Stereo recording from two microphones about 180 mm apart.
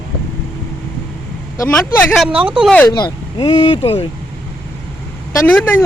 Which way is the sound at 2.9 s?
25° left (ahead or behind).